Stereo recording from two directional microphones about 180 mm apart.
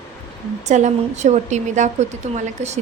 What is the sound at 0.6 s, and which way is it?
A woman's voice, 40° right (ahead or behind).